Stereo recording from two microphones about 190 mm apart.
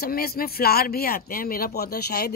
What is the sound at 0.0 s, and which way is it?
A woman's voice, 55° left (ahead or behind).